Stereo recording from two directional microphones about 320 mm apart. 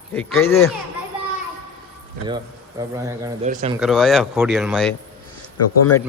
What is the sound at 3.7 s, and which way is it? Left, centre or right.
A man's voice, centre.